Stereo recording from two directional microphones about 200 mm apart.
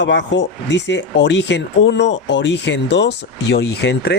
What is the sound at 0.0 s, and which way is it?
Speech, 65° left (ahead or behind).